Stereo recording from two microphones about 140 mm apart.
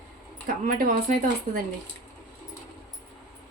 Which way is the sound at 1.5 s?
65° right (ahead or behind).